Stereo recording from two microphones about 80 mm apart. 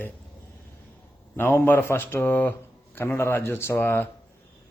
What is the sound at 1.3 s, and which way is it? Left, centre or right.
A man's voice, left.